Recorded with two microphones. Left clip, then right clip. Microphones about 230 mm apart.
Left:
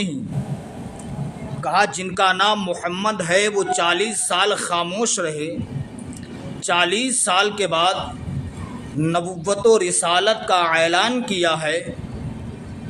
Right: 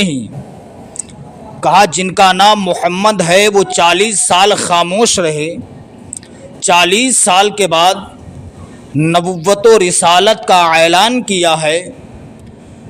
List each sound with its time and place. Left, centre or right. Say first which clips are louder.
1.6 s a man's voice: right 10 dB; right
6.6 s a man's voice: right 10 dB; right
9.0 s a man's voice: right 10 dB; right